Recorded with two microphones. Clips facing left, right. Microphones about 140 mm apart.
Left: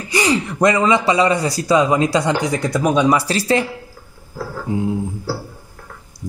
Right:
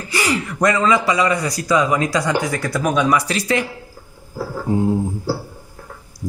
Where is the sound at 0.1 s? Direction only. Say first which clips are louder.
Left 3 dB; 20° left (ahead or behind).